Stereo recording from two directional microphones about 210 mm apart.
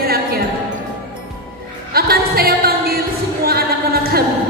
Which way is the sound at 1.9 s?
45° right (ahead or behind).